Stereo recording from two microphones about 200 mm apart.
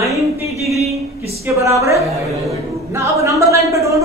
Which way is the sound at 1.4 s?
15° right (ahead or behind).